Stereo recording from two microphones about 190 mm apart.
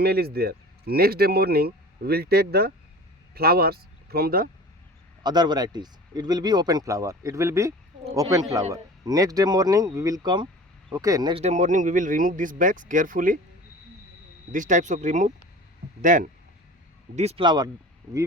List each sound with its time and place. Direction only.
0.0 s speech: 55° right (ahead or behind)
5.2 s speech: 20° right (ahead or behind)
11.4 s speech: 40° right (ahead or behind)
14.5 s speech: 40° right (ahead or behind)
17.2 s speech: 30° right (ahead or behind)